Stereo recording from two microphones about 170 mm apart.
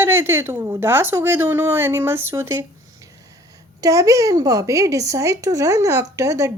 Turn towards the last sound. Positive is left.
turn(degrees=-15)  # may be behind; listen again after turning